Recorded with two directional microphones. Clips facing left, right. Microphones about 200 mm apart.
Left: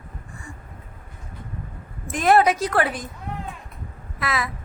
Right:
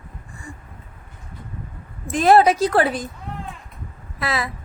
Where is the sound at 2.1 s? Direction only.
30° right (ahead or behind).